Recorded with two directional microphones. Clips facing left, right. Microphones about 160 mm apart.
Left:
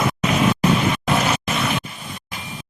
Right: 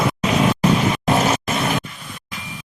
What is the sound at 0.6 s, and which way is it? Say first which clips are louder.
Vehicle: right 1 dB; 35° right (ahead or behind).